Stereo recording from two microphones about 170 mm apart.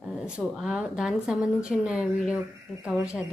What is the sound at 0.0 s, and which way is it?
Speech, centre (ahead or behind).